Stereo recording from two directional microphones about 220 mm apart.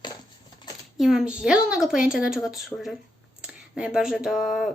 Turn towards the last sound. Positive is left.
turn(degrees=0)  # may be behind; listen again after turning